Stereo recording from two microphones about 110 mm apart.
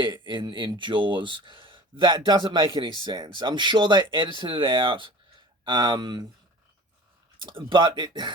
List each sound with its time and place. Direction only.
0.0 s speech: 45° right (ahead or behind)
7.4 s speech: 45° right (ahead or behind)